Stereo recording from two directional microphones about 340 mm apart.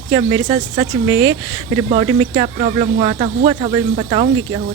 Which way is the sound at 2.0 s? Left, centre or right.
Centre.